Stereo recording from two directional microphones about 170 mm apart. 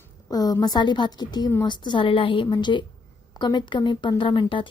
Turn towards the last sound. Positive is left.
turn(degrees=30)  # may be behind; listen again after turning